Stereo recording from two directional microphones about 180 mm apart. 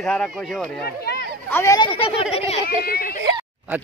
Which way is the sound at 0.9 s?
60° left (ahead or behind).